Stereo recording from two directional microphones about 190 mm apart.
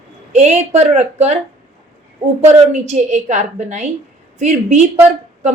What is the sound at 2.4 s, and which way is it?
A woman's voice, 35° right (ahead or behind).